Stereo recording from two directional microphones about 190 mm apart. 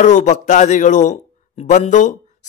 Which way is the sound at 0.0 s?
40° left (ahead or behind).